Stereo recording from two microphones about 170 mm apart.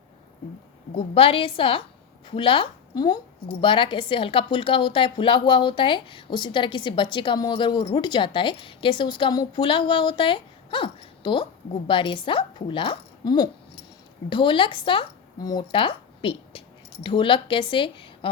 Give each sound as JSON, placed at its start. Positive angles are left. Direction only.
{"t": 0.9, "sound": "a woman's voice", "side_deg": 35}